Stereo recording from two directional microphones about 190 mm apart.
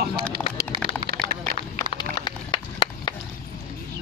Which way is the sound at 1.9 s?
25° left (ahead or behind).